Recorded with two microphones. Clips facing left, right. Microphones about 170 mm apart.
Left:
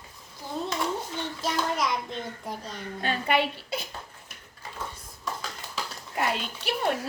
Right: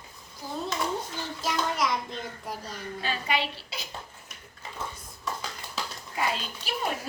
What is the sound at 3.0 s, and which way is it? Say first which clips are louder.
Speech: left 4 dB; 55° left (ahead or behind).